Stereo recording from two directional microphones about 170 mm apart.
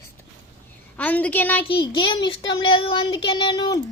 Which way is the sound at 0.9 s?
10° left (ahead or behind).